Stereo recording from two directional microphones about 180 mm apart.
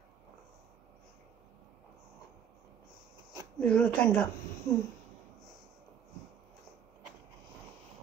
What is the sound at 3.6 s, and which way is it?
Speech, 5° left (ahead or behind).